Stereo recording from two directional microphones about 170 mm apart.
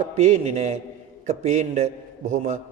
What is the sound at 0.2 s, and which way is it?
A man's voice, 40° right (ahead or behind).